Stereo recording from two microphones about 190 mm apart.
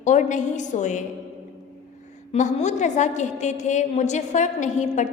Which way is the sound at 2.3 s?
40° left (ahead or behind).